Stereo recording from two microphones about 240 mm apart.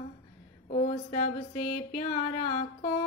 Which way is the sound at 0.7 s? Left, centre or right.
Left.